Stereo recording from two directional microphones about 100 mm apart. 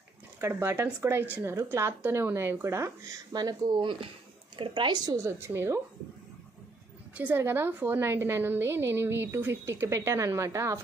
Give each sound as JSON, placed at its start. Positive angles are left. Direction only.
{"t": 0.4, "sound": "a woman's voice", "side_deg": -25}
{"t": 5.1, "sound": "a woman's voice", "side_deg": -30}
{"t": 7.2, "sound": "a woman's voice", "side_deg": -20}